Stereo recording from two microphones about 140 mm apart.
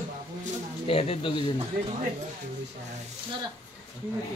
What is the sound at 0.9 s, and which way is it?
Speech, 40° left (ahead or behind).